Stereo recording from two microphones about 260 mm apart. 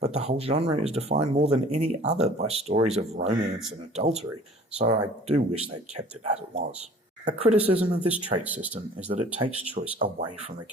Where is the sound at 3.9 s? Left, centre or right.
Right.